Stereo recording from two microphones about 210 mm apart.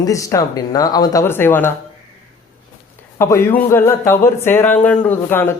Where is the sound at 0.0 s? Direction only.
15° left (ahead or behind).